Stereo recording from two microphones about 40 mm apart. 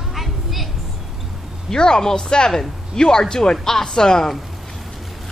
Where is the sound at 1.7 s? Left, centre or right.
Centre.